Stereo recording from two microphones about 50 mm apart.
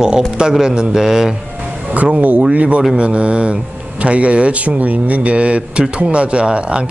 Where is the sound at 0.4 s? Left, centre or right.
Centre.